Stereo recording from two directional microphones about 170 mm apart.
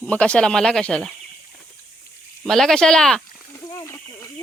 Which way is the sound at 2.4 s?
Centre (ahead or behind).